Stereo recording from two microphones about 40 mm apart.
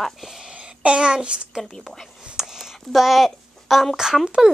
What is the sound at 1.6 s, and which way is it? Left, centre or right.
Speech, centre.